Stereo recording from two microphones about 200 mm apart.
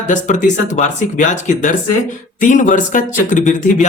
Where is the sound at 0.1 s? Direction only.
40° left (ahead or behind).